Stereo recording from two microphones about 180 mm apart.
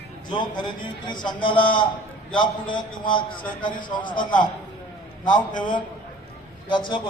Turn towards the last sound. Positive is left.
turn(degrees=25)  # may be behind; listen again after turning